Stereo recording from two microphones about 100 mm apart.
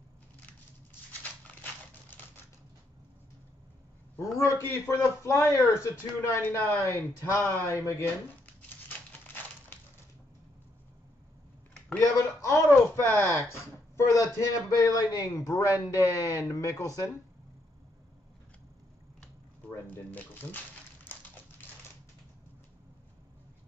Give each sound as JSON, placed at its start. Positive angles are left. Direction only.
{"t": 4.2, "sound": "a man's voice", "side_deg": 30}
{"t": 8.6, "sound": "crumpling", "side_deg": 15}
{"t": 12.0, "sound": "speech", "side_deg": 30}
{"t": 19.9, "sound": "speech", "side_deg": 15}